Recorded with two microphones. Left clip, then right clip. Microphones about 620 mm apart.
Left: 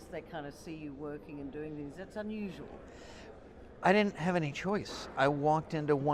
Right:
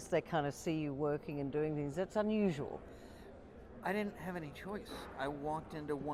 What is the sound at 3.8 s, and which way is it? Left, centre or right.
Speech, left.